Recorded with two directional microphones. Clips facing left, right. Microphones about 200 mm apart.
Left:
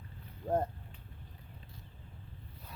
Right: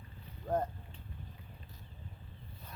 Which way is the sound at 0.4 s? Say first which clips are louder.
Left 2 dB; 25° left (ahead or behind).